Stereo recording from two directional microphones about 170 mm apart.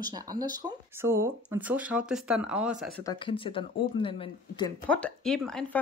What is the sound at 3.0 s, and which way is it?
Speech, 30° left (ahead or behind).